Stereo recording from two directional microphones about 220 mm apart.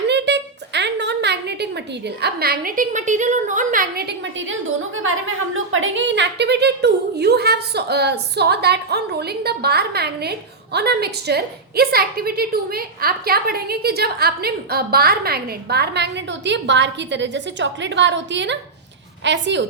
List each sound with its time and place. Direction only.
0.1 s a woman's voice: 50° right (ahead or behind)
5.7 s a woman's voice: 60° right (ahead or behind)